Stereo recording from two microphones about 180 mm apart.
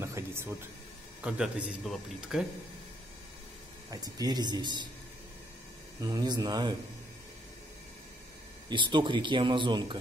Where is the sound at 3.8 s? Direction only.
20° right (ahead or behind).